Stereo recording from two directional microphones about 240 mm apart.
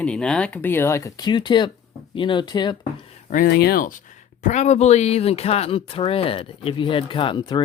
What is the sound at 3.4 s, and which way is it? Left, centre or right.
Speech, left.